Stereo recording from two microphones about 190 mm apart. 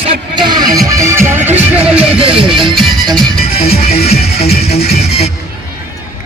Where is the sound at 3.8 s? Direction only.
30° left (ahead or behind).